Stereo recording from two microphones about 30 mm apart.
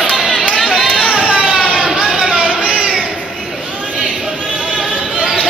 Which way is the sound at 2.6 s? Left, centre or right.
Right.